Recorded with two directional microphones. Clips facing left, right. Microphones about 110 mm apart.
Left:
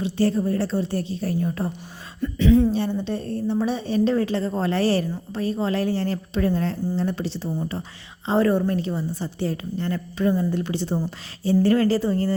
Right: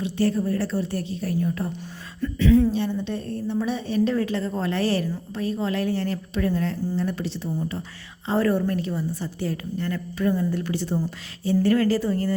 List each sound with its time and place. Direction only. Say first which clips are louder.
0.0 s a woman's voice: left 2 dB; 30° left (ahead or behind)
2.7 s a woman's voice: left 1 dB; 35° left (ahead or behind)